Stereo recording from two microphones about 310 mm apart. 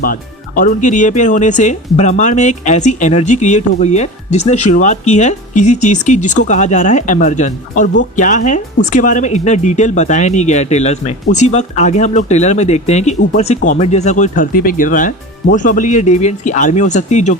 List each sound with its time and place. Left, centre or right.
0.0 s speech: left